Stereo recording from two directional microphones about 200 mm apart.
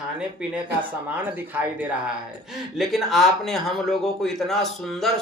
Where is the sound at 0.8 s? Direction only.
10° right (ahead or behind).